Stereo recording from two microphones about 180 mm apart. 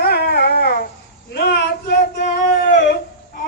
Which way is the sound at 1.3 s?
60° left (ahead or behind).